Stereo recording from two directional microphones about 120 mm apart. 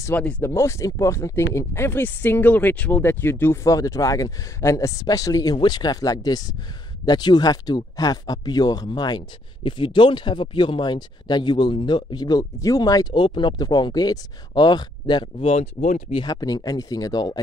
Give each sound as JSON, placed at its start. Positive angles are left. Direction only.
{"t": 0.1, "sound": "speech", "side_deg": 10}
{"t": 0.5, "sound": "speech", "side_deg": 25}
{"t": 15.4, "sound": "speech", "side_deg": 60}
{"t": 16.2, "sound": "speech", "side_deg": 30}